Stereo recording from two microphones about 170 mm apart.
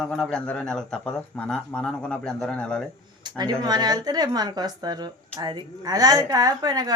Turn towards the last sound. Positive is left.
turn(degrees=-20)  # may be behind; listen again after turning